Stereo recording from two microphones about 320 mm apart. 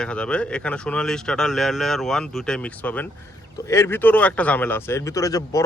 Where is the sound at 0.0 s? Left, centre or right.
Centre.